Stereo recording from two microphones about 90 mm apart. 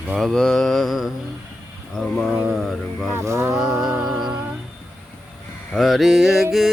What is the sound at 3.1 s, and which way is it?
Cattle, 30° right (ahead or behind).